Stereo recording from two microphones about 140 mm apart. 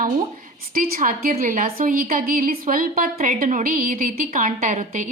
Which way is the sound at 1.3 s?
60° right (ahead or behind).